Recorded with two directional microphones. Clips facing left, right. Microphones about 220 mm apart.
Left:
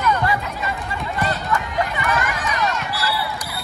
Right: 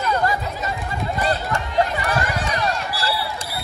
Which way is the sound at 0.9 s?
30° right (ahead or behind).